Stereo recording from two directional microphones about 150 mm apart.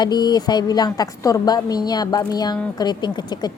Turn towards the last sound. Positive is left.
turn(degrees=30)  # may be behind; listen again after turning